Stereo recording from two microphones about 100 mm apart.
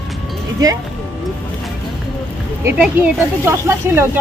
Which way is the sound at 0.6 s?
40° right (ahead or behind).